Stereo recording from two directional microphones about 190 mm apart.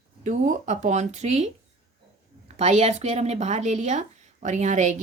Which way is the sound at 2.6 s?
35° right (ahead or behind).